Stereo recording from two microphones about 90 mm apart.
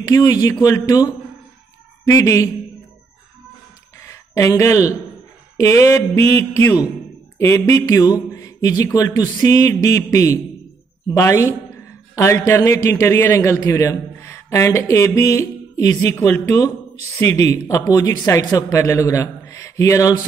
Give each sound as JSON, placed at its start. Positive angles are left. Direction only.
{"t": 0.0, "sound": "speech", "side_deg": 40}
{"t": 4.4, "sound": "speech", "side_deg": 30}
{"t": 7.3, "sound": "a woman's voice", "side_deg": 30}